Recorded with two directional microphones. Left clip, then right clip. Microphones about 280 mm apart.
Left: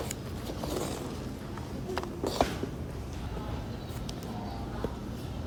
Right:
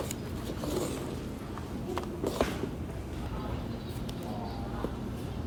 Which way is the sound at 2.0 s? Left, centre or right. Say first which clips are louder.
Left 2 dB; centre.